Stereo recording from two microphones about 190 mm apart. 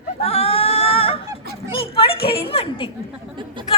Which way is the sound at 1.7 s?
30° left (ahead or behind).